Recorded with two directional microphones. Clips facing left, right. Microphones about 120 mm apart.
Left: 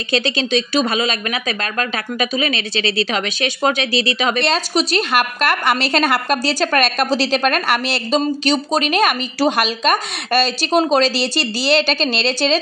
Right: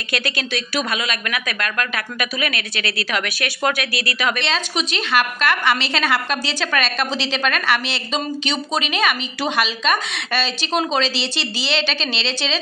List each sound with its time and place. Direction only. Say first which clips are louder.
0.1 s speech: left 7 dB; 25° left (ahead or behind)
4.4 s a woman's voice: left 5 dB; 40° left (ahead or behind)